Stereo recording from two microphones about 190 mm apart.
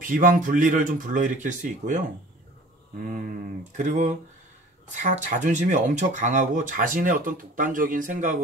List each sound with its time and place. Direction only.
0.0 s speech: 45° right (ahead or behind)
3.7 s speech: 40° right (ahead or behind)